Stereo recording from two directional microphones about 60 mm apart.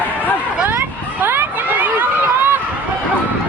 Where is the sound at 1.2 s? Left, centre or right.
Right.